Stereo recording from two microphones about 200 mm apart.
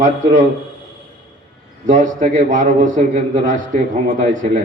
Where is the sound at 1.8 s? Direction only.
40° right (ahead or behind).